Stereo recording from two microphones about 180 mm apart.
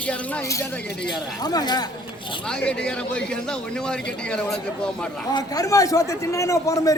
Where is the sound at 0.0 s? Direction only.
5° left (ahead or behind).